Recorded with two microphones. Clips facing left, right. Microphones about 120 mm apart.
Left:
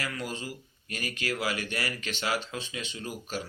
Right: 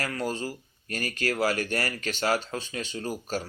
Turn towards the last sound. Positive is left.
turn(degrees=-40)  # may be behind; listen again after turning